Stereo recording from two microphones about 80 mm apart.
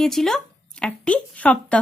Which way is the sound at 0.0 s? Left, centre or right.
Centre.